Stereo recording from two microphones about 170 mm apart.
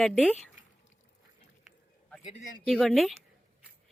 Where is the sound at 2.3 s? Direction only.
50° left (ahead or behind).